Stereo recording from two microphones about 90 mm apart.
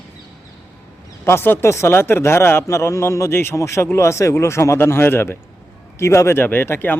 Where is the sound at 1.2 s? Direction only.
25° left (ahead or behind).